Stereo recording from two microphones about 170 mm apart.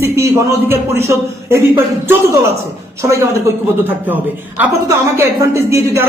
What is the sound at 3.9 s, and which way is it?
A man's voice, 10° right (ahead or behind).